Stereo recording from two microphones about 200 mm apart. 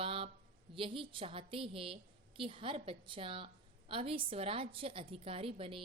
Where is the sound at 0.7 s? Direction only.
25° right (ahead or behind).